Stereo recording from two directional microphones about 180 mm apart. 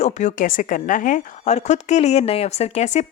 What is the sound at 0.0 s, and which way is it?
A woman's voice, 40° left (ahead or behind).